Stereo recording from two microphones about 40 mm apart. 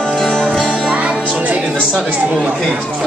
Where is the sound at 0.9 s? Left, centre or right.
Right.